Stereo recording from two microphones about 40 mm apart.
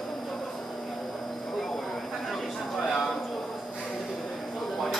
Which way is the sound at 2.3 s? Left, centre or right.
Centre.